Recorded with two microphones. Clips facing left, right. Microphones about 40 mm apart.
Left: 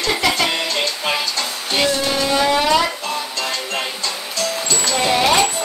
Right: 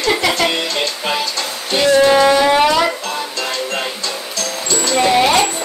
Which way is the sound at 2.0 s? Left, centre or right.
Right.